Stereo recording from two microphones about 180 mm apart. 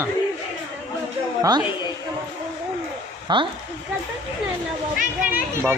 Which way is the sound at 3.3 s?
25° right (ahead or behind).